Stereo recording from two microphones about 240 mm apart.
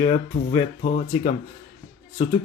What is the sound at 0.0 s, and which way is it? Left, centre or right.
Speech, left.